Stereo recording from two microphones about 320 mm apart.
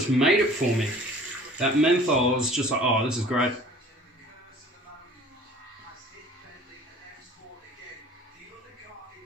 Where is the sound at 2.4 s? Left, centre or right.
Centre.